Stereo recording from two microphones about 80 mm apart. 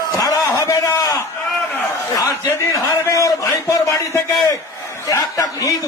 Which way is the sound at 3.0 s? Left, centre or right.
Left.